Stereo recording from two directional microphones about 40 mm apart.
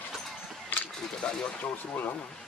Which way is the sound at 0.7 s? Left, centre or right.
Left.